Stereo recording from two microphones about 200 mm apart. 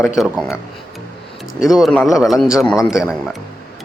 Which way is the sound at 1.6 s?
Centre (ahead or behind).